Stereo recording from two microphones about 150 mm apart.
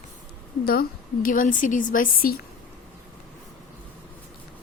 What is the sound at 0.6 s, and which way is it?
A woman's voice, 85° left.